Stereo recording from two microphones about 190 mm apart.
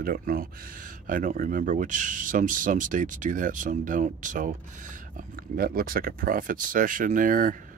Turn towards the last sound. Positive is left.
turn(degrees=-45)  # may be behind; listen again after turning